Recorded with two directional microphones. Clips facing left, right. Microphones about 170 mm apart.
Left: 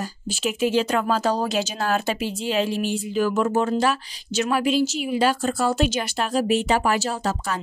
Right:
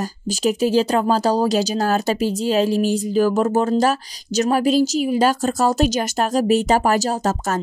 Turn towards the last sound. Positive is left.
turn(degrees=-45)  # may be behind; listen again after turning